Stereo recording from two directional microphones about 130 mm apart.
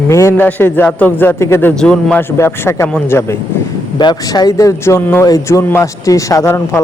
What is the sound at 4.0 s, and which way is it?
Speech, 35° left (ahead or behind).